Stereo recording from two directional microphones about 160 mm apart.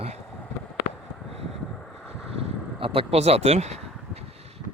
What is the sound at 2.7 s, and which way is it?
Speech, 35° right (ahead or behind).